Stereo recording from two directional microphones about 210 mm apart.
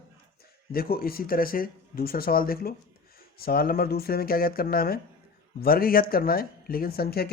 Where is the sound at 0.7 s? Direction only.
45° left (ahead or behind).